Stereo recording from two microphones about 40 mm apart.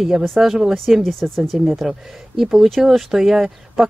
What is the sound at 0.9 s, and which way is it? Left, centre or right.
Speech, centre.